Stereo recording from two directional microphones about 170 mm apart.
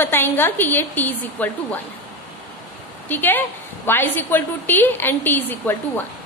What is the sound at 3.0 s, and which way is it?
A woman's voice, 10° left (ahead or behind).